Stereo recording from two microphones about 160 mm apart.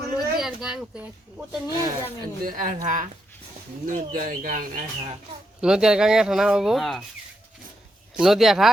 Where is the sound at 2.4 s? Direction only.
55° right (ahead or behind).